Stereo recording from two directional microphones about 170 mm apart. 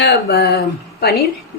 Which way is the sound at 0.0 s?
80° left.